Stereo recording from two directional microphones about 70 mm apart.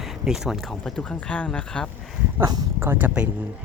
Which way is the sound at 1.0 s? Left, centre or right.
Centre.